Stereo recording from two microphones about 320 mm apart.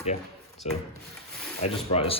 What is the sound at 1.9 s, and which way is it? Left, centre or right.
Speech, centre.